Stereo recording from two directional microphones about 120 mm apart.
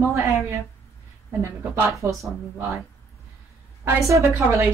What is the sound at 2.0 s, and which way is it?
Speech, 20° right (ahead or behind).